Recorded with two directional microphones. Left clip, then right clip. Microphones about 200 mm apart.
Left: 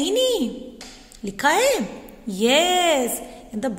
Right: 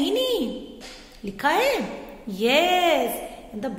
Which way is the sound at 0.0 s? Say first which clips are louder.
Left 3 dB; 35° left (ahead or behind).